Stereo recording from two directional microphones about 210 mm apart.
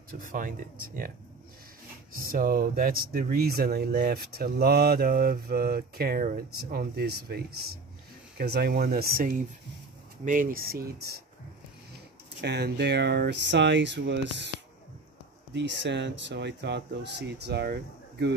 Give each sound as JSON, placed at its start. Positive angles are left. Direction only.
{"t": 0.1, "sound": "speech", "side_deg": -40}
{"t": 2.1, "sound": "speech", "side_deg": -45}
{"t": 12.4, "sound": "speech", "side_deg": -50}
{"t": 15.5, "sound": "speech", "side_deg": -55}